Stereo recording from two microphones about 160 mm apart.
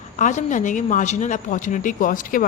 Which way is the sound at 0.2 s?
50° left (ahead or behind).